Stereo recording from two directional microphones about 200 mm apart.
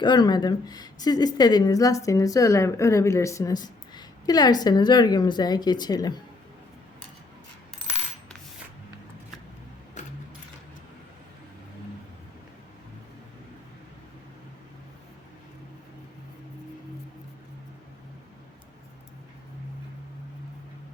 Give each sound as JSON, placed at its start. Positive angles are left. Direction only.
{"t": 0.0, "sound": "a woman's voice", "side_deg": 20}
{"t": 10.0, "sound": "sewing machine", "side_deg": 35}